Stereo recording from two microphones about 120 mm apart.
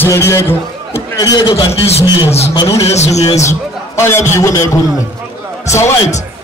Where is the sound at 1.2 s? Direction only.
35° left (ahead or behind).